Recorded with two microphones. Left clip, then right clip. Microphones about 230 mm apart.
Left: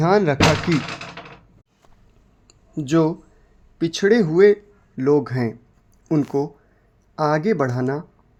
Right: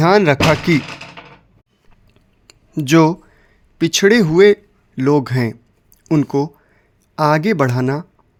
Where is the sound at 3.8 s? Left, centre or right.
Right.